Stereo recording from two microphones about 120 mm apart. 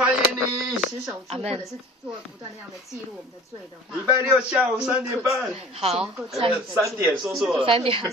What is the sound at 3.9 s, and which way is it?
A man's voice, 10° right (ahead or behind).